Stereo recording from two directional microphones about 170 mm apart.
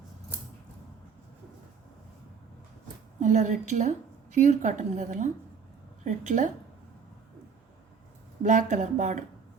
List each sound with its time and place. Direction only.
3.2 s a woman's voice: 45° right (ahead or behind)
8.4 s a woman's voice: 50° right (ahead or behind)